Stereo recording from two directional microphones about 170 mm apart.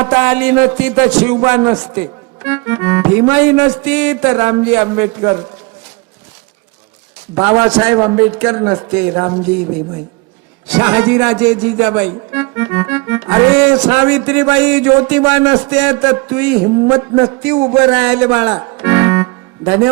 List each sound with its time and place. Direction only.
0.0 s a man's voice: 10° right (ahead or behind)
2.0 s music: 10° right (ahead or behind)
3.2 s a man's voice: 10° right (ahead or behind)
7.3 s a man's voice: 15° right (ahead or behind)
10.8 s a man's voice: 20° right (ahead or behind)
11.0 s a man's voice: 10° right (ahead or behind)
16.6 s a man's voice: 20° right (ahead or behind)
17.4 s a man's voice: 5° right (ahead or behind)
18.5 s organ: 15° right (ahead or behind)